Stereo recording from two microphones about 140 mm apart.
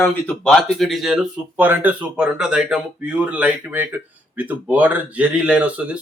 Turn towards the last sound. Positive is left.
turn(degrees=-10)  # may be behind; listen again after turning